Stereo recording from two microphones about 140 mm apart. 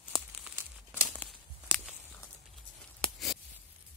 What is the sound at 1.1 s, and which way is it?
Tearing, 10° left (ahead or behind).